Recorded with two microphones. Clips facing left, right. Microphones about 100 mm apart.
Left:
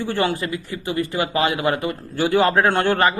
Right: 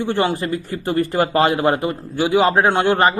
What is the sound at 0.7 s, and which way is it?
A man's voice, 45° right (ahead or behind).